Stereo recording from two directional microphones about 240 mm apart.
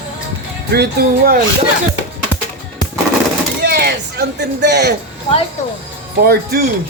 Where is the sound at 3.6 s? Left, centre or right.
Right.